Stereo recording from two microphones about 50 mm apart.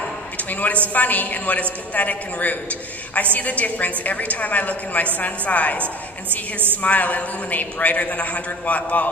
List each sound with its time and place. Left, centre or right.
0.3 s a sound: left
0.9 s a woman's voice: left
6.8 s a woman's voice: left